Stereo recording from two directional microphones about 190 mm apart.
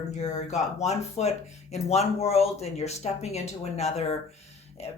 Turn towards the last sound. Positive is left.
turn(degrees=35)  # may be behind; listen again after turning